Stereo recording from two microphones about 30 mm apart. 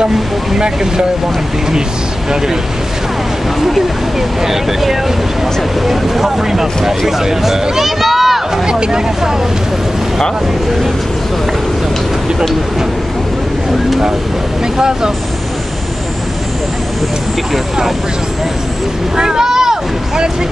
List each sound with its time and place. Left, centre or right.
4.4 s speech: centre
8.6 s speech: right
14.8 s speech: right
19.1 s speech: right